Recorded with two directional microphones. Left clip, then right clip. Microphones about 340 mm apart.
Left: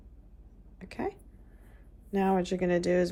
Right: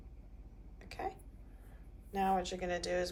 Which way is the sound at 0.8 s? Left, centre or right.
Left.